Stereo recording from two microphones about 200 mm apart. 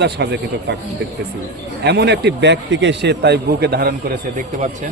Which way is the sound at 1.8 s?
55° right (ahead or behind).